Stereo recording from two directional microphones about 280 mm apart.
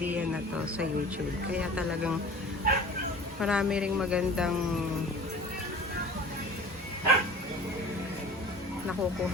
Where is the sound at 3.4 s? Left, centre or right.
Centre.